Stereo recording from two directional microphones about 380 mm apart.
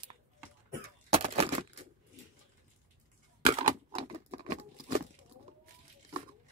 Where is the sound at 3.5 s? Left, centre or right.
Centre.